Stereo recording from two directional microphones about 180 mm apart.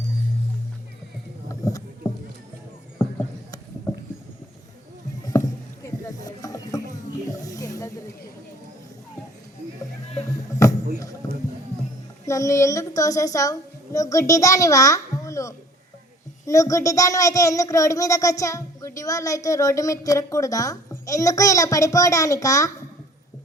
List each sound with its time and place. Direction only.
1.6 s rowboat: 20° left (ahead or behind)
2.0 s music: 20° left (ahead or behind)
3.0 s a sound: 20° left (ahead or behind)
3.9 s vehicle: 20° left (ahead or behind)
5.3 s rowboat: 15° left (ahead or behind)
6.1 s mechanisms: 20° left (ahead or behind)
7.3 s snake: 20° left (ahead or behind)
10.5 s a sound: 20° left (ahead or behind)
12.2 s a woman's voice: 15° left (ahead or behind)